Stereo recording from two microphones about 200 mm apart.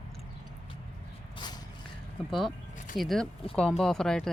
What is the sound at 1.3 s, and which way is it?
Shuffle, 20° left (ahead or behind).